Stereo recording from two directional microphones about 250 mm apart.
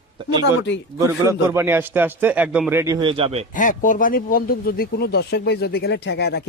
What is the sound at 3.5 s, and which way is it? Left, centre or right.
Speech, left.